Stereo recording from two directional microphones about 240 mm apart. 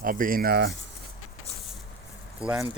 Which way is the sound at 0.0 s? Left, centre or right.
Right.